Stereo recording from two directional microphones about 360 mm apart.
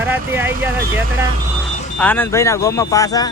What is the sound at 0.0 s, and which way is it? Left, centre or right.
Speech, centre.